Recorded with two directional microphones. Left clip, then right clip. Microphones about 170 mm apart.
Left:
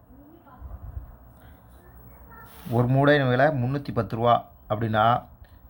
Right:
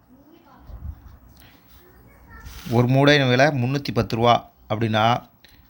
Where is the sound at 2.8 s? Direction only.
20° right (ahead or behind).